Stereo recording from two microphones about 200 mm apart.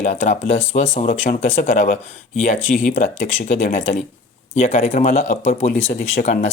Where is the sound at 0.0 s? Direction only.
40° left (ahead or behind).